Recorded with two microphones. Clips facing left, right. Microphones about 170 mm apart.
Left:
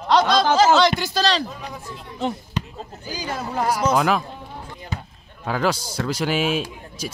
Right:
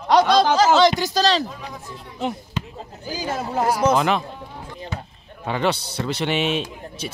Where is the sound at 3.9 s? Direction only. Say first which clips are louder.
Even; centre (ahead or behind).